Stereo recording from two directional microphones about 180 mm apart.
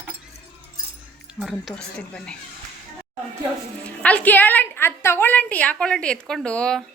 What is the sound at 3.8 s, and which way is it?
A woman's voice, 5° left (ahead or behind).